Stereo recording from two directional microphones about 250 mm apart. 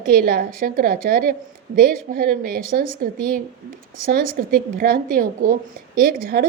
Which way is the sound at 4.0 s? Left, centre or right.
Right.